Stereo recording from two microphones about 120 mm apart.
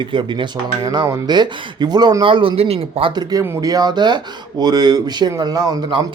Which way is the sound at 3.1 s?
35° right (ahead or behind).